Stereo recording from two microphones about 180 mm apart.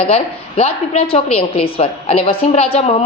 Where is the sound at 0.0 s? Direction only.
35° left (ahead or behind).